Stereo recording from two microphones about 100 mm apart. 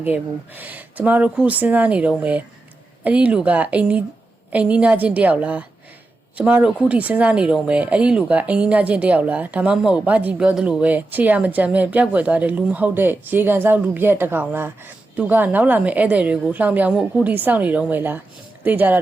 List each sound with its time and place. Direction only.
0.0 s a woman's voice: 20° right (ahead or behind)
17.3 s speech: 15° right (ahead or behind)